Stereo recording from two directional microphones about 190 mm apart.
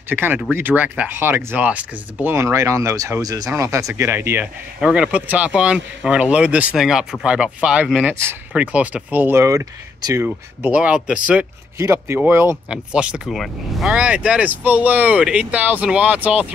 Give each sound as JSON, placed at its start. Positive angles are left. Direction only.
{"t": 0.1, "sound": "speech", "side_deg": -10}